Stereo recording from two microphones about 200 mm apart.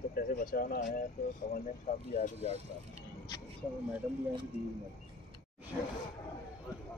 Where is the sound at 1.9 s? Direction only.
35° left (ahead or behind).